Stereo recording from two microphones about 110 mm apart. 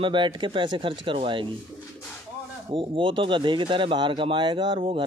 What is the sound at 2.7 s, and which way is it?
Speech, 50° right (ahead or behind).